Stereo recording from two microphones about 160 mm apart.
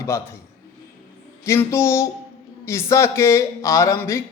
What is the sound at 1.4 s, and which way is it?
A man's voice, 15° left (ahead or behind).